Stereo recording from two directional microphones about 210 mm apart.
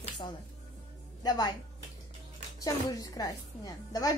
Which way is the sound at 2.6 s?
15° left (ahead or behind).